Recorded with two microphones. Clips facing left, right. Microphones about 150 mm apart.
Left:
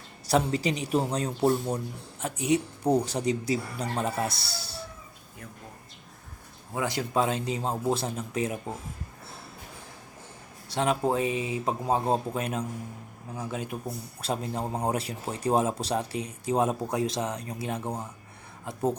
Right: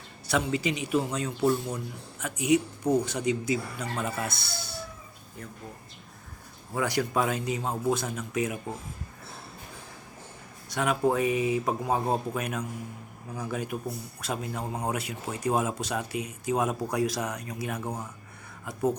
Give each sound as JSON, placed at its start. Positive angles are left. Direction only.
{"t": 0.3, "sound": "speech", "side_deg": 35}
{"t": 6.7, "sound": "speech", "side_deg": 25}
{"t": 10.7, "sound": "speech", "side_deg": 30}